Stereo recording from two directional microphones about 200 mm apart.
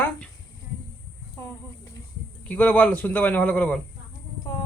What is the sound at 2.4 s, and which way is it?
Speech, 5° left (ahead or behind).